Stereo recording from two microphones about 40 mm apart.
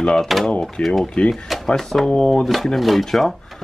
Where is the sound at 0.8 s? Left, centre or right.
Left.